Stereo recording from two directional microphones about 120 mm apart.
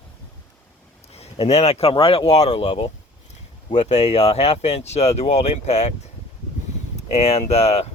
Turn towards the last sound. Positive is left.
turn(degrees=55)  # may be behind; listen again after turning